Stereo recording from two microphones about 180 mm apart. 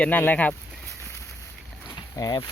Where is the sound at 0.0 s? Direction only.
10° left (ahead or behind).